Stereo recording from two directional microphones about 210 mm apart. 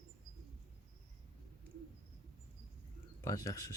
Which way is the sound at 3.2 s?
15° left (ahead or behind).